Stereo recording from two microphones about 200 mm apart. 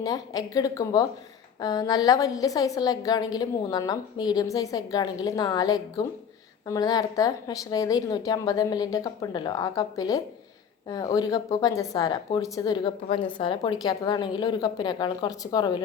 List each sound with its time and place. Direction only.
0.0 s speech: 20° left (ahead or behind)